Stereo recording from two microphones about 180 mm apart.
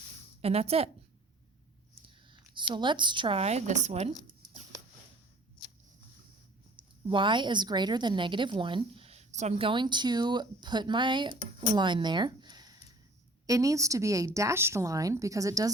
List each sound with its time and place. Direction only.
0.4 s a woman's voice: 35° right (ahead or behind)
2.2 s speech: 25° right (ahead or behind)
6.7 s a woman's voice: 25° right (ahead or behind)